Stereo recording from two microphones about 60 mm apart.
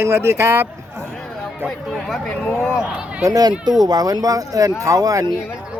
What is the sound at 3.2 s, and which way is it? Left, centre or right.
Speech, right.